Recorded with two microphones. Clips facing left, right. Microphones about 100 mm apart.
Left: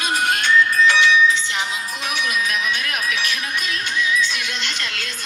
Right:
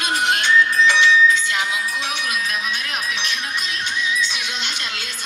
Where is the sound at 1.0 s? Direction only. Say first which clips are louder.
Right 1 dB; 25° left (ahead or behind).